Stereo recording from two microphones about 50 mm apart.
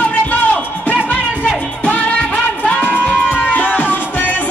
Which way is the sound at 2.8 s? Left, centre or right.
Left.